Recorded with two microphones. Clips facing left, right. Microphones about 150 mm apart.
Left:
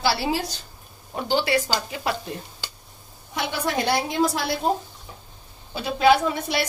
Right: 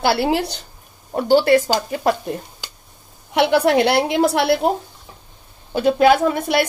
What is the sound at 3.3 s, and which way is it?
A woman's voice, 70° right (ahead or behind).